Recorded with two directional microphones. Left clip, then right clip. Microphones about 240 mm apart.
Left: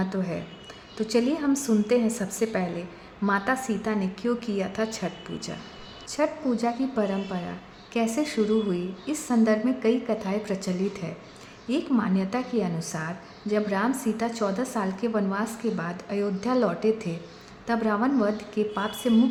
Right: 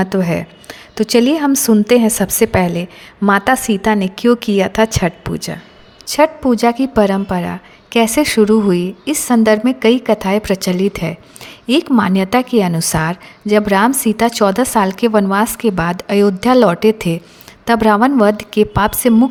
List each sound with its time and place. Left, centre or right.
0.0 s a woman's voice: right